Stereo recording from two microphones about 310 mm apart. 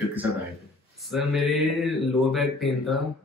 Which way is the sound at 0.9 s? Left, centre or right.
Centre.